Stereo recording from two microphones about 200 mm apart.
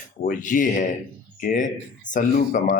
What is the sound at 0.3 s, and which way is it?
Speech, 40° left (ahead or behind).